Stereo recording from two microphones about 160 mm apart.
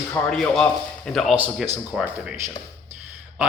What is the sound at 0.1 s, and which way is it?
A man's voice, 5° left (ahead or behind).